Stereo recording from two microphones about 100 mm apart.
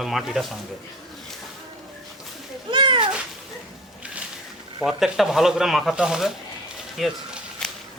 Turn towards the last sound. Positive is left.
turn(degrees=5)  # may be behind; listen again after turning